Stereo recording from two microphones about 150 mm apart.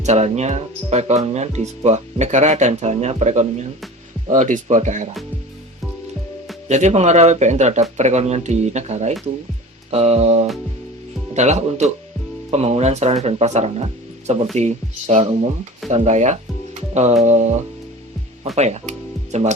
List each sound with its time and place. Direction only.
0.0 s speech: 45° right (ahead or behind)
6.7 s speech: 50° right (ahead or behind)
16.9 s music: 50° right (ahead or behind)
17.2 s speech: 50° right (ahead or behind)
18.5 s speech: 45° right (ahead or behind)